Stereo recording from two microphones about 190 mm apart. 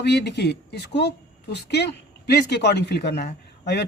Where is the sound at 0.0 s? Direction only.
60° left (ahead or behind).